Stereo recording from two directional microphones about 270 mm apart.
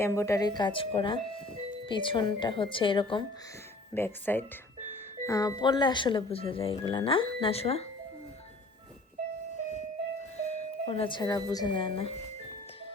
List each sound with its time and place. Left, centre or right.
0.0 s speech: centre
3.9 s speech: centre
10.4 s speech: left